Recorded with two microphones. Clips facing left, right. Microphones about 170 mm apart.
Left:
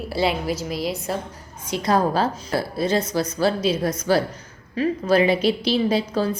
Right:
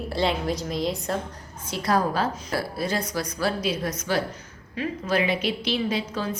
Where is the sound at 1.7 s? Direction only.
20° left (ahead or behind).